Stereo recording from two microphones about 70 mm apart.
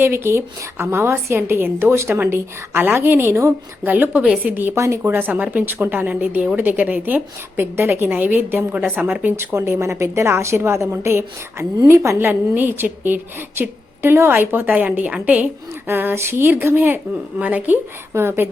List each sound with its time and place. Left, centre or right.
0.0 s a woman's voice: right
3.8 s a woman's voice: right
4.7 s a woman's voice: right
9.3 s a woman's voice: right; by 15.4 s centre
15.9 s a woman's voice: right
18.1 s a woman's voice: right